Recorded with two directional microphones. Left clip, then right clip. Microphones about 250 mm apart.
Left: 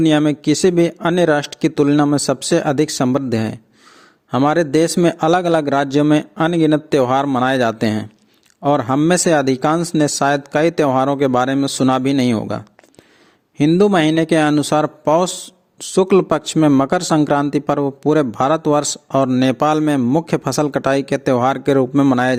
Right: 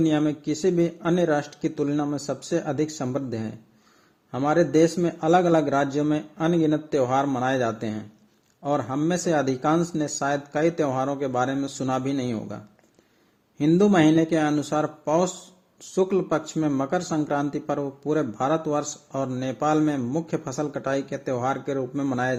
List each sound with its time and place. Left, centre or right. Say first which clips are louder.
0.0 s speech: left 8 dB; left
13.6 s speech: left 6 dB; left